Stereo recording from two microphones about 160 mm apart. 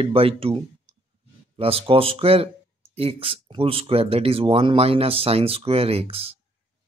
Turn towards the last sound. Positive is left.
turn(degrees=-40)  # may be behind; listen again after turning